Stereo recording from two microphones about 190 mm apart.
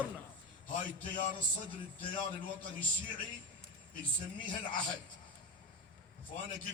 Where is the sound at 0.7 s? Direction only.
80° right.